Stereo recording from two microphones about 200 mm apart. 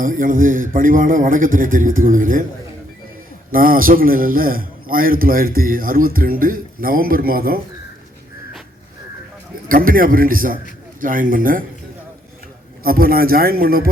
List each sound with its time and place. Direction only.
0.0 s a man's voice: 40° right (ahead or behind)
3.5 s a man's voice: 45° right (ahead or behind)
9.6 s a man's voice: 45° right (ahead or behind)
12.8 s a man's voice: 45° right (ahead or behind)